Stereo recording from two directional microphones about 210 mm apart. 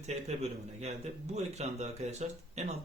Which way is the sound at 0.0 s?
30° right (ahead or behind).